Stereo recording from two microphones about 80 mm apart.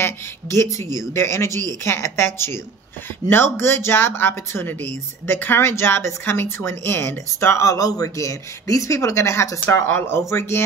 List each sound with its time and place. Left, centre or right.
0.0 s speech: left